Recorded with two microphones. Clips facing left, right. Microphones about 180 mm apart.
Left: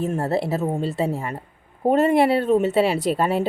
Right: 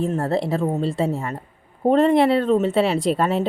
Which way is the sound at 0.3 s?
5° left (ahead or behind).